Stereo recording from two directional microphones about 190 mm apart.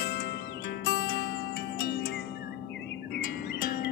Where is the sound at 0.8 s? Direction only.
55° left (ahead or behind).